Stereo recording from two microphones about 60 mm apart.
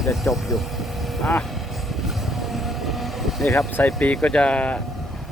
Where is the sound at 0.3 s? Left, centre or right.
Left.